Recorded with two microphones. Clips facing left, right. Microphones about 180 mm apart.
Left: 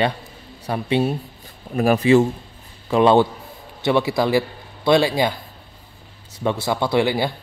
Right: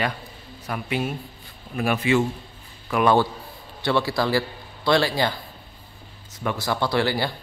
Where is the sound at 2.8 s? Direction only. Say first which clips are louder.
Left 5 dB; 25° left (ahead or behind).